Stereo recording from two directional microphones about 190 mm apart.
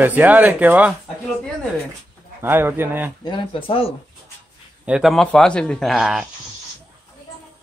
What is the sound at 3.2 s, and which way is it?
Speech, 25° left (ahead or behind).